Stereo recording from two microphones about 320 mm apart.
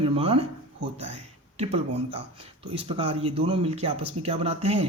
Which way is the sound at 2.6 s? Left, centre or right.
Centre.